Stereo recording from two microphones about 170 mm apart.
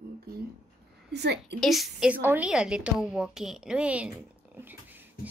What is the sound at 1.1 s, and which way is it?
Speech, 80° right.